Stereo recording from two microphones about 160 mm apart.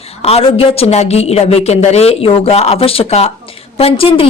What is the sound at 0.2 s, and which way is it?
A woman's voice, 40° left (ahead or behind).